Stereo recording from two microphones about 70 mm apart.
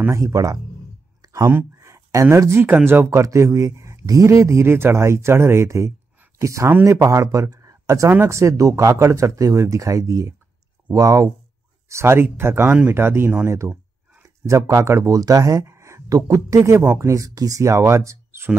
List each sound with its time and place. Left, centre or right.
0.1 s speech: right
1.2 s a sound: right
1.8 s a sound: right
2.6 s speech: right
3.1 s speech: right
6.7 s speech: right
11.9 s speech: right
16.1 s speech: right